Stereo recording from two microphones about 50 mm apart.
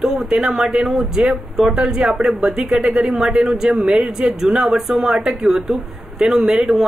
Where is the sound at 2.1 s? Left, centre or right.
Centre.